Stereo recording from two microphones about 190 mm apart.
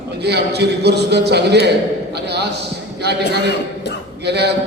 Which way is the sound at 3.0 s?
60° right (ahead or behind).